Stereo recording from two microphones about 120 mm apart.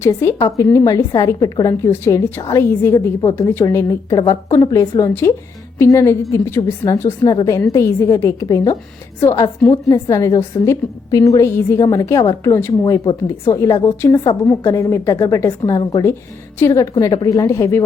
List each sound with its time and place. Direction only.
0.0 s a woman's voice: 20° left (ahead or behind)
1.9 s a woman's voice: 20° left (ahead or behind)
16.6 s a woman's voice: 25° left (ahead or behind)